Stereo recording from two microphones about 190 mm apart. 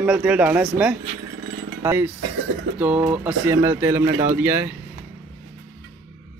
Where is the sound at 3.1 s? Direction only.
10° right (ahead or behind).